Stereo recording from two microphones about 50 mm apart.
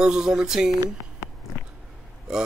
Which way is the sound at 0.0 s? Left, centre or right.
Centre.